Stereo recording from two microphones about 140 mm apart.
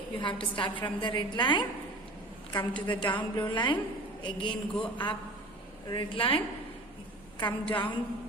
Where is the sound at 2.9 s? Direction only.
35° left (ahead or behind).